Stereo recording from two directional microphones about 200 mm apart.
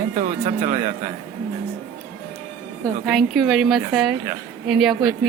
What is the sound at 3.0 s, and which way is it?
A woman's voice, centre (ahead or behind).